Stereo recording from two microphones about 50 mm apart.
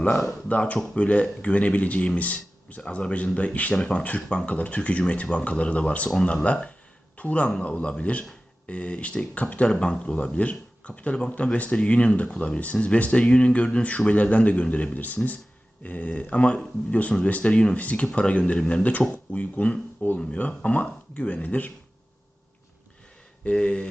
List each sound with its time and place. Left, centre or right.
0.1 s speech: centre
0.4 s speech: left
23.4 s speech: centre